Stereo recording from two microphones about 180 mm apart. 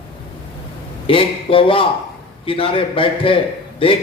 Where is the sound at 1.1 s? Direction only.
30° left (ahead or behind).